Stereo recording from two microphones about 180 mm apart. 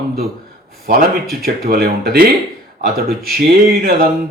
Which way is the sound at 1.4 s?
55° right (ahead or behind).